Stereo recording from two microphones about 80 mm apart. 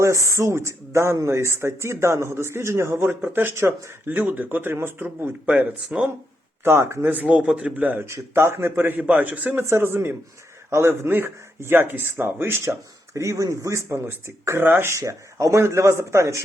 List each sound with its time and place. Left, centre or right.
0.0 s speech: right
5.5 s speech: centre
6.7 s speech: right
7.1 s speech: centre
8.0 s speech: right
9.6 s speech: right
14.9 s speech: right